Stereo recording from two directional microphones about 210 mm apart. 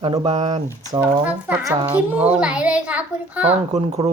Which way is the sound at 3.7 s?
30° right (ahead or behind).